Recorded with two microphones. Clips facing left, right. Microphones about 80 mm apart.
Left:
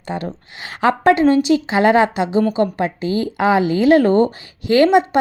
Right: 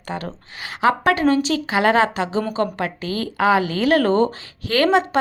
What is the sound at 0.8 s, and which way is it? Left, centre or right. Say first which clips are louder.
A woman's voice: left 4 dB; left.